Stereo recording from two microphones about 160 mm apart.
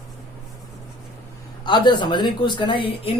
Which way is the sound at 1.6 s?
30° left (ahead or behind).